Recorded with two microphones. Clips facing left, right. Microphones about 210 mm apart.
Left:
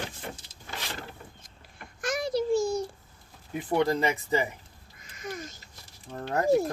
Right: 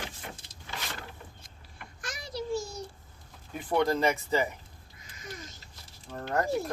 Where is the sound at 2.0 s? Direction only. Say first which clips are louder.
Left 10 dB; 50° left (ahead or behind).